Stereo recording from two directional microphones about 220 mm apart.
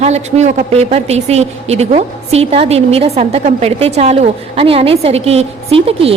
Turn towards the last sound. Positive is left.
turn(degrees=-25)  # may be behind; listen again after turning